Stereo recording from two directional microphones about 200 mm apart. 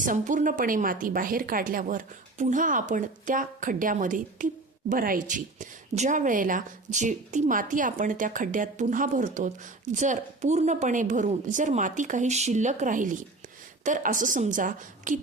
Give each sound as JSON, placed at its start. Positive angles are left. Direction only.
{"t": 0.0, "sound": "a woman's voice", "side_deg": -40}